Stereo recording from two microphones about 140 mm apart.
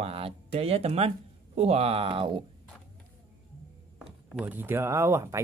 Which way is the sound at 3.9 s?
10° right (ahead or behind).